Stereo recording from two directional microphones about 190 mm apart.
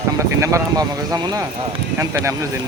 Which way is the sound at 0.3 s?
15° right (ahead or behind).